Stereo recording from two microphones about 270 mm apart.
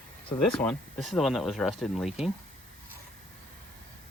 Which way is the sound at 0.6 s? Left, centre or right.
Centre.